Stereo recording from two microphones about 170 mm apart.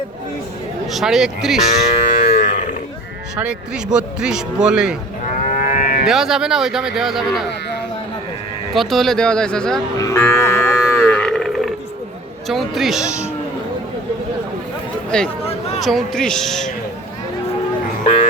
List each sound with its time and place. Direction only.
0.9 s speech: centre (ahead or behind)
2.1 s livestock: 55° left (ahead or behind)
3.9 s speech: 5° right (ahead or behind)
5.4 s livestock: 50° left (ahead or behind)
6.1 s speech: centre (ahead or behind)
8.7 s speech: centre (ahead or behind)
10.0 s livestock: 15° left (ahead or behind)
12.5 s speech: centre (ahead or behind)
15.1 s speech: 5° left (ahead or behind)